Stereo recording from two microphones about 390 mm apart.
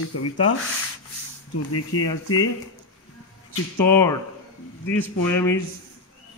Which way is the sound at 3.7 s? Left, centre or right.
Centre.